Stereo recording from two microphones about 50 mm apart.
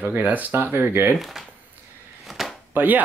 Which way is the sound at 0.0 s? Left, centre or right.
Right.